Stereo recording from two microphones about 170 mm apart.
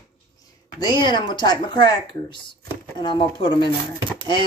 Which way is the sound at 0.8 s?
25° left (ahead or behind).